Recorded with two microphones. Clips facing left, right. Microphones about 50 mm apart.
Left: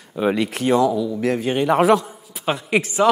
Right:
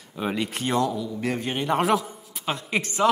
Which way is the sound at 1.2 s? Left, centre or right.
Centre.